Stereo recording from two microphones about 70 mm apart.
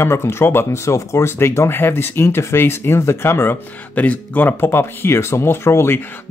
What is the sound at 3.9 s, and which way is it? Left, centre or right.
Speech, left.